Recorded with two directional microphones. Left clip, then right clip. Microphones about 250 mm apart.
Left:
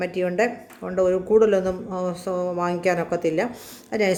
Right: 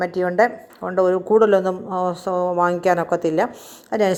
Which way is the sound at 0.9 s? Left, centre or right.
Centre.